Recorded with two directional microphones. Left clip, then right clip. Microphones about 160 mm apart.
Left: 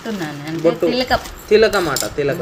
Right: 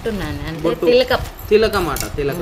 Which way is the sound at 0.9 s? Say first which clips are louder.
Right 4 dB; 65° right (ahead or behind).